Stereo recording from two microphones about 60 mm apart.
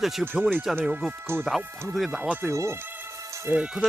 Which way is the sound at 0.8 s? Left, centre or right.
Right.